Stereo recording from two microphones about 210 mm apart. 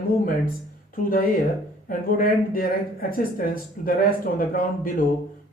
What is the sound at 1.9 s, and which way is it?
Speech, 40° left (ahead or behind).